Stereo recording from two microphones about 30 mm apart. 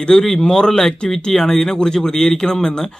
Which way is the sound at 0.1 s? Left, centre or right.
Left.